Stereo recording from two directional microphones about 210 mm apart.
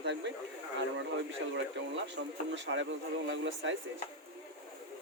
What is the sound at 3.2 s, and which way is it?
Speech, 60° right (ahead or behind).